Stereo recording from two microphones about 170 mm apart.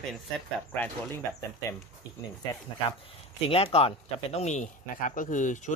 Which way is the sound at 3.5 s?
35° left (ahead or behind).